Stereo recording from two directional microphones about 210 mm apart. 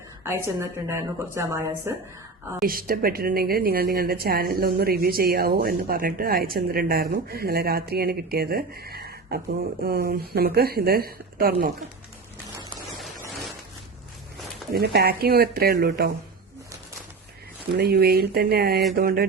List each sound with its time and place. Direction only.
0.3 s a woman's voice: 10° right (ahead or behind)
2.6 s speech: 45° right (ahead or behind)
14.7 s speech: 50° right (ahead or behind)
17.7 s speech: 50° right (ahead or behind)